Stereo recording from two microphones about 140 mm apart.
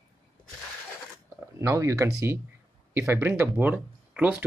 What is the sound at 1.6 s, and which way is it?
Speech, 20° right (ahead or behind).